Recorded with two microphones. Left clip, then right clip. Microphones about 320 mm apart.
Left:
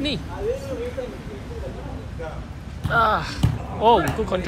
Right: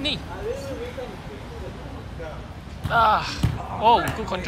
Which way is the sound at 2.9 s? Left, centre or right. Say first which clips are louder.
Right 1 dB; centre.